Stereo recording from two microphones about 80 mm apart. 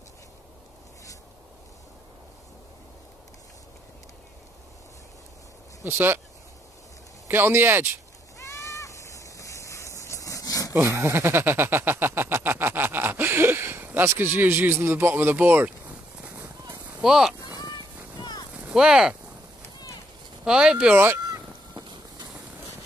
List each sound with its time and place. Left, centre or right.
5.9 s speech: right
7.2 s speech: right
8.5 s a sound: left
10.7 s a sound: right; by 16.3 s centre
17.0 s speech: centre
17.6 s a sound: left
18.6 s speech: centre
20.4 s speech: centre
20.9 s speech: right
21.3 s goose: right